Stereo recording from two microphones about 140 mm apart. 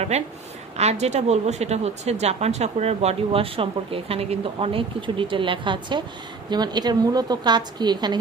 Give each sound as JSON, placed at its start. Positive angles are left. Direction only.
{"t": 0.1, "sound": "a woman's voice", "side_deg": -50}